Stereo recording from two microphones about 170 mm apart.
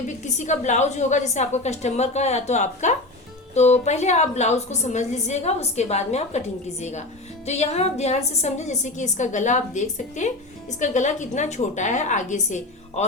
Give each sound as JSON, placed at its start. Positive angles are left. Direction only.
{"t": 0.2, "sound": "a woman's voice", "side_deg": 45}